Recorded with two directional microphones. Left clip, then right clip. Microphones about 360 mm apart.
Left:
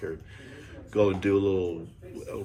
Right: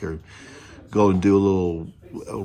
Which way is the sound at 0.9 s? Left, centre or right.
Centre.